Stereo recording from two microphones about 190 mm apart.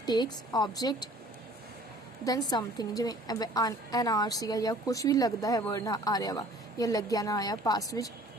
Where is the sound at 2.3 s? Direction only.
20° left (ahead or behind).